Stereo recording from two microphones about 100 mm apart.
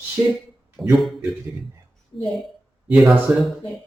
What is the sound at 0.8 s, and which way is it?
Speech, centre (ahead or behind).